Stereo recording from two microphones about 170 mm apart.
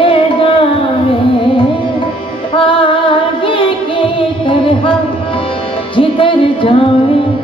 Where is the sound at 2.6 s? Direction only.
30° left (ahead or behind).